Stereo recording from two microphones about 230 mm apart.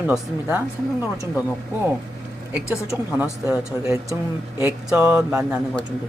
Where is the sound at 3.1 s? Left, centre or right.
Centre.